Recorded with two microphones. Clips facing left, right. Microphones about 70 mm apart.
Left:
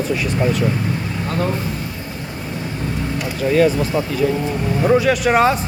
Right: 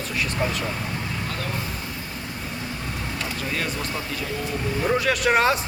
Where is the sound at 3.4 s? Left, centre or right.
Centre.